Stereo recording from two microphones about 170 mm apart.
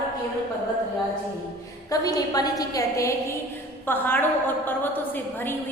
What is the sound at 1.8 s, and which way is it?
A woman's voice, 20° left (ahead or behind).